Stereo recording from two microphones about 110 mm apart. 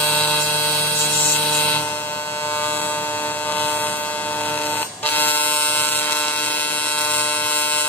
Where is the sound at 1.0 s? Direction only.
15° left (ahead or behind).